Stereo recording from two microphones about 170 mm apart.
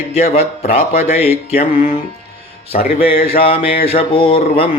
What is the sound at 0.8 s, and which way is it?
Speech, 65° left (ahead or behind).